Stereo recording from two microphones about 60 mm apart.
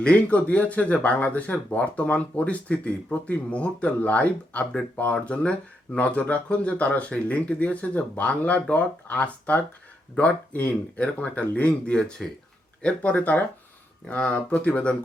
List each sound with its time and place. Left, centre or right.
0.0 s speech: left